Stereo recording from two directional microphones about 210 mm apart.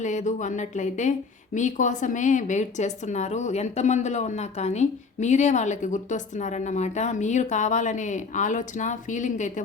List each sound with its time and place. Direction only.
0.0 s a woman's voice: 35° left (ahead or behind)